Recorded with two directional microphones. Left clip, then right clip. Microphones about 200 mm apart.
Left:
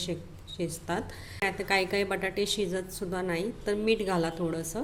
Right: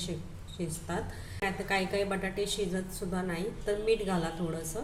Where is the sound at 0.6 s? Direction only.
50° left (ahead or behind).